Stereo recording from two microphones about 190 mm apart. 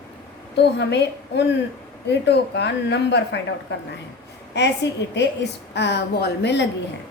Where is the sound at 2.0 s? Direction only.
60° left (ahead or behind).